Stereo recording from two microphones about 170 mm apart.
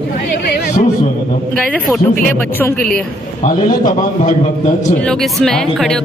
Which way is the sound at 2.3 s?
10° left (ahead or behind).